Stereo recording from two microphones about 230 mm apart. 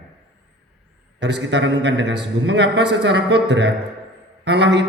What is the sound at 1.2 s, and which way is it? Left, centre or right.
A man's voice, right.